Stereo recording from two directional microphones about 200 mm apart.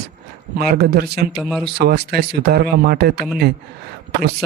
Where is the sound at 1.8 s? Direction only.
55° right (ahead or behind).